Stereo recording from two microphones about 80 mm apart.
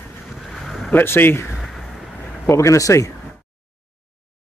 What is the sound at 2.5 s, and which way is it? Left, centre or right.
Speech, left.